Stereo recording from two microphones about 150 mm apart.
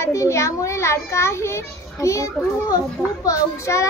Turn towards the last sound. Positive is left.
turn(degrees=20)  # may be behind; listen again after turning